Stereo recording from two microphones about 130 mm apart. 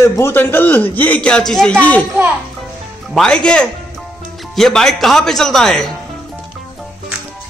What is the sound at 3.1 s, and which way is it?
A man's voice, 5° left (ahead or behind).